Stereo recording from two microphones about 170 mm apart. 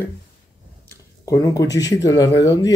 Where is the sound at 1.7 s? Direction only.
20° left (ahead or behind).